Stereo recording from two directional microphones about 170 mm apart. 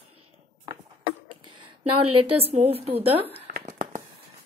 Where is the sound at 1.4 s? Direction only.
30° right (ahead or behind).